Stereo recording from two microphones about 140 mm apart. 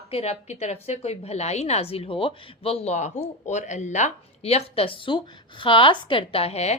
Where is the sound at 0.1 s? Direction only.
45° left (ahead or behind).